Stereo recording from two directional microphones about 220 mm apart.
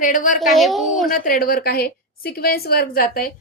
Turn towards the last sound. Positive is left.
turn(degrees=40)  # may be behind; listen again after turning